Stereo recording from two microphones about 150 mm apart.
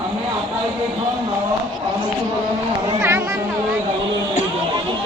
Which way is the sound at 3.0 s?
15° right (ahead or behind).